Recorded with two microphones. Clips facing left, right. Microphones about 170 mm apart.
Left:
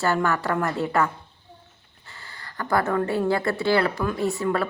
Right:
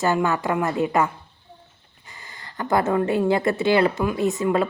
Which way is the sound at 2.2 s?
20° right (ahead or behind).